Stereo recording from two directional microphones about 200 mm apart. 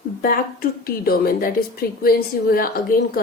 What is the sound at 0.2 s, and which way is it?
A woman's voice, 45° left (ahead or behind).